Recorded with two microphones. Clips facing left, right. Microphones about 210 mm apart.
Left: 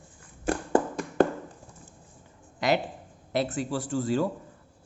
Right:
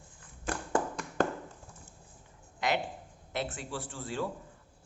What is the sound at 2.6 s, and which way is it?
Speech, 35° left (ahead or behind).